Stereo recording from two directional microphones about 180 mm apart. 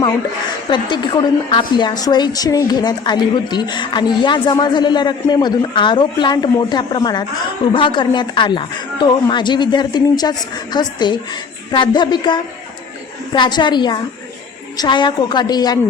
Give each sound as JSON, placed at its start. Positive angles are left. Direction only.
{"t": 0.7, "sound": "a woman's voice", "side_deg": 25}